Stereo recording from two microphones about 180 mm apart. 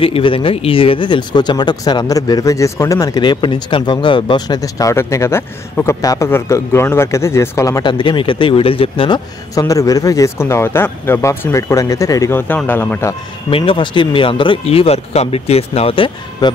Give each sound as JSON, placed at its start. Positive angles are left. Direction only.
{"t": 0.0, "sound": "speech", "side_deg": 30}
{"t": 13.5, "sound": "speech", "side_deg": 30}